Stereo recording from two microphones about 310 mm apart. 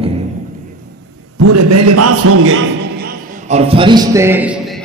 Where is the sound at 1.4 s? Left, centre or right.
Right.